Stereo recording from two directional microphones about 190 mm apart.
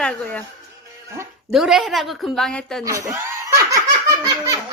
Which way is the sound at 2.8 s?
15° right (ahead or behind).